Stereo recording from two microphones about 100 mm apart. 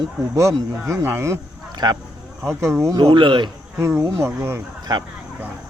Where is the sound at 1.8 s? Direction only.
45° right (ahead or behind).